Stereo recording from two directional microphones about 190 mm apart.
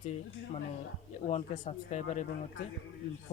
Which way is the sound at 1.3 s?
35° left (ahead or behind).